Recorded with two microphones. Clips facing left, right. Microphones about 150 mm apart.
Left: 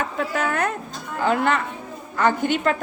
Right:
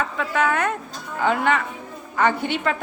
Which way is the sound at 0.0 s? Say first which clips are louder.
Right 2 dB; 45° left (ahead or behind).